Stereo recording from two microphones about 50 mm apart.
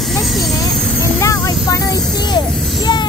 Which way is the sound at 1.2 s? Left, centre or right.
Left.